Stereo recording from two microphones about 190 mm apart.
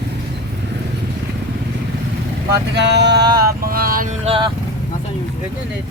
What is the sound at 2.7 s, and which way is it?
Speech, 65° right (ahead or behind).